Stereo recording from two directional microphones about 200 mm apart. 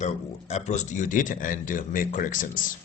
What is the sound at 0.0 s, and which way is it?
Speech, 35° left (ahead or behind).